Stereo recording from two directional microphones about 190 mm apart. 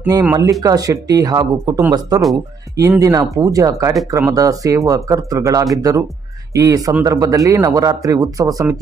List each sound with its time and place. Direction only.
0.0 s speech: 15° right (ahead or behind)